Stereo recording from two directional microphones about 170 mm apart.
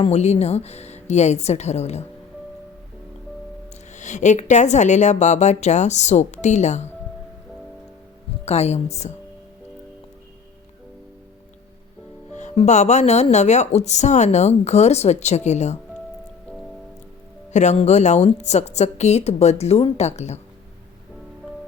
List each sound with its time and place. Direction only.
0.0 s speech: 40° left (ahead or behind)
3.9 s a woman's voice: 45° left (ahead or behind)
8.4 s speech: 40° left (ahead or behind)
12.3 s speech: 45° left (ahead or behind)
17.5 s speech: 45° left (ahead or behind)